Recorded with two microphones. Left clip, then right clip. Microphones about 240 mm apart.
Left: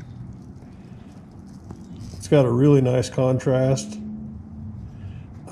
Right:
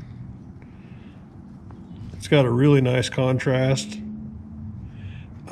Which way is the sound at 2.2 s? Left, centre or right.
Right.